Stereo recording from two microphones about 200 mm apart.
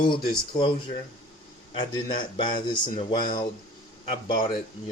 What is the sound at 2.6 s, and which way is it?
Speech, 45° left (ahead or behind).